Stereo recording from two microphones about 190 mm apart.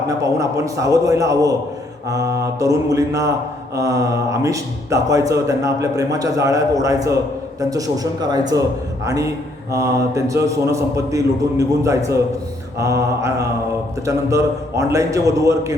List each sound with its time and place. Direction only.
0.1 s a man's voice: 15° right (ahead or behind)